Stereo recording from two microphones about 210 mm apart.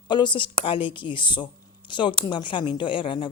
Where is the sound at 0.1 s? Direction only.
20° left (ahead or behind).